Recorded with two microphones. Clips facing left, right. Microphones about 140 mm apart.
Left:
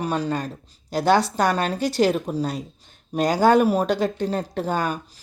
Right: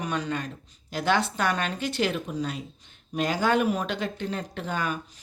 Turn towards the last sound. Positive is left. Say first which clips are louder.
# left 6 dB
turn(degrees=40)  # may be behind; listen again after turning